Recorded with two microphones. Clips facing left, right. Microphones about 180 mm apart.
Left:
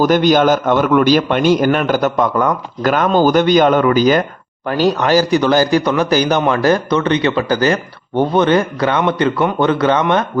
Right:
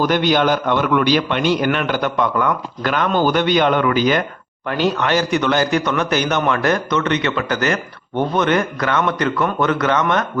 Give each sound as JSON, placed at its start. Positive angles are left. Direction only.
{"t": 0.0, "sound": "a man's voice", "side_deg": 45}